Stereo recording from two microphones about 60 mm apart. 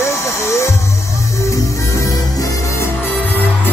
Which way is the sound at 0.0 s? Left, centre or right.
Left.